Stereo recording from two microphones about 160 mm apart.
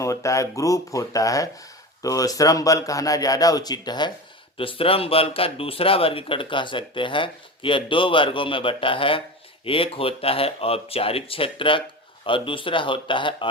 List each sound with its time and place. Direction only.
0.0 s speech: 20° left (ahead or behind)